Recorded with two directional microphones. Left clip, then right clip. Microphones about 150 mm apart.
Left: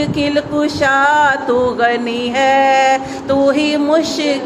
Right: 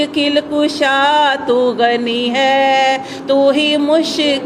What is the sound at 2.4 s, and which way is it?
Mantra, 50° right (ahead or behind).